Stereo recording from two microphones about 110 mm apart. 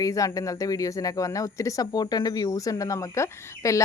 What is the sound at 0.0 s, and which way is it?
Speech, 30° left (ahead or behind).